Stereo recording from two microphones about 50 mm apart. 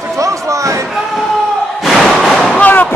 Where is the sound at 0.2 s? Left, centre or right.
Right.